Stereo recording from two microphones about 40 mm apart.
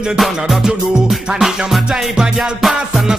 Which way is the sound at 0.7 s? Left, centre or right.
Centre.